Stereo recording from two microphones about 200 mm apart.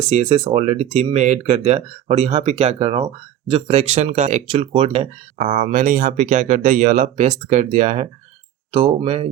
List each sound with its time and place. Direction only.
0.1 s speech: 30° right (ahead or behind)